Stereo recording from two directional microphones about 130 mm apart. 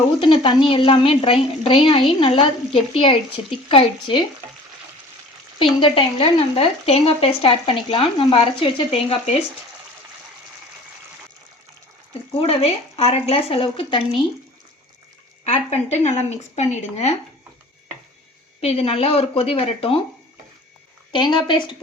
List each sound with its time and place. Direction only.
0.2 s a woman's voice: 40° left (ahead or behind)
5.8 s speech: 40° left (ahead or behind)
12.4 s speech: 50° left (ahead or behind)
15.4 s speech: 60° left (ahead or behind)
18.6 s speech: 50° left (ahead or behind)
21.1 s a woman's voice: 35° left (ahead or behind)